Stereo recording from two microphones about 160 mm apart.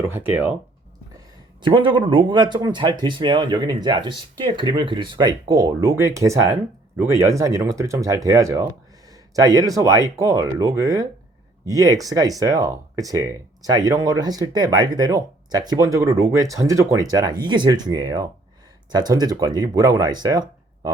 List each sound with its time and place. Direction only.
0.0 s speech: 15° right (ahead or behind)
1.6 s speech: 30° right (ahead or behind)